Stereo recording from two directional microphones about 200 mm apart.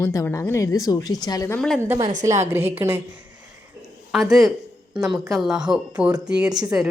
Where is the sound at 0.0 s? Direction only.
15° left (ahead or behind).